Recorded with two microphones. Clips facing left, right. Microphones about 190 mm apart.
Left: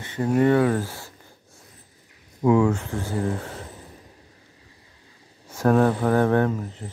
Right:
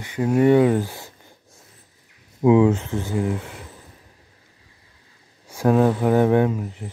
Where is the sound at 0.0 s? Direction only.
10° right (ahead or behind).